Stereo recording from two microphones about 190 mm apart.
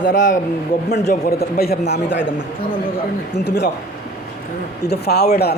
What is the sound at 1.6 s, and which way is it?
Speech, 60° left (ahead or behind).